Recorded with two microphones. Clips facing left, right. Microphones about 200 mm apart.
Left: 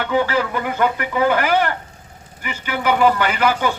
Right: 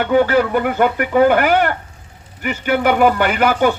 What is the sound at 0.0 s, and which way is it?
Speech, 50° right (ahead or behind).